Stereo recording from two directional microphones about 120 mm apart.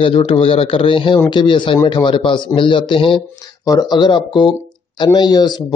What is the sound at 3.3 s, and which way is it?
Speech, 30° left (ahead or behind).